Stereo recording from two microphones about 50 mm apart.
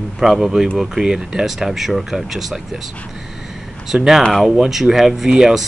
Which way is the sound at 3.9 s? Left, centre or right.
Centre.